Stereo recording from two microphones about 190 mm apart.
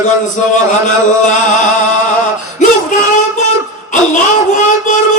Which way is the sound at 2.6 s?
40° left (ahead or behind).